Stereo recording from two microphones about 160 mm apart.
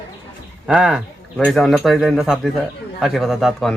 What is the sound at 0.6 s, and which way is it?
Speech, 5° right (ahead or behind).